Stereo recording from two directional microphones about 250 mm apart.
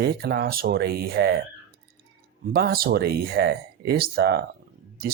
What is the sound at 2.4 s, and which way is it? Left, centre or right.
Speech, right.